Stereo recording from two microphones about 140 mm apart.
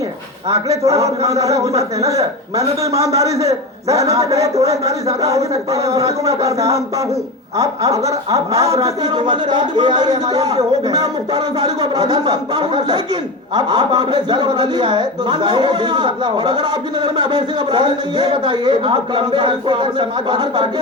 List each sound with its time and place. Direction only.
0.5 s a man's voice: 20° right (ahead or behind)